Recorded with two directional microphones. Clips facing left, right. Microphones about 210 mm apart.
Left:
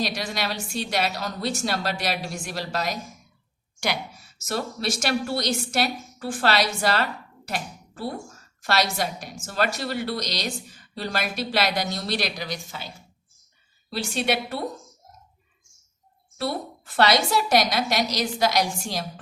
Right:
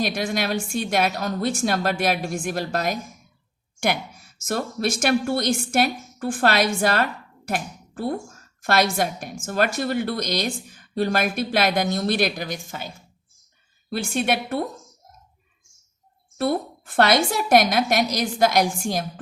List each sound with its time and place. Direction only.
0.0 s a woman's voice: 50° right (ahead or behind)
13.9 s a woman's voice: 50° right (ahead or behind)
16.4 s a woman's voice: 50° right (ahead or behind)